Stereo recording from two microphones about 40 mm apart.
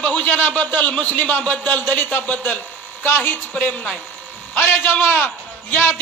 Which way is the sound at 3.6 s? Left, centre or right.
Left.